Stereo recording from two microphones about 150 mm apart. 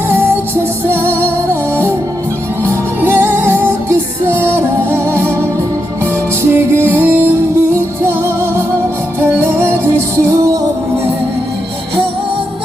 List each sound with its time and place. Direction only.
0.9 s music: 15° right (ahead or behind)
3.0 s music: 15° right (ahead or behind)
6.5 s music: 15° right (ahead or behind)